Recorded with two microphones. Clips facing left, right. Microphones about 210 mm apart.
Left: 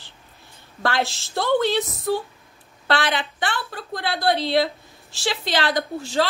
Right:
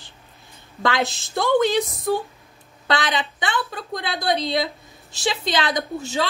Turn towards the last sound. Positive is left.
turn(degrees=-20)  # may be behind; listen again after turning